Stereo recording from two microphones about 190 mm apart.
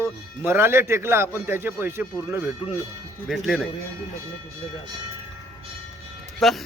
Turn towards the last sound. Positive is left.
turn(degrees=0)  # may be behind; listen again after turning